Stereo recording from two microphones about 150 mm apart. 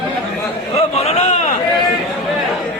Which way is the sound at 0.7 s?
45° left (ahead or behind).